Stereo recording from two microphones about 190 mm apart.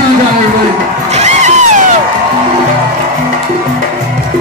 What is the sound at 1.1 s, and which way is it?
Music, 40° right (ahead or behind).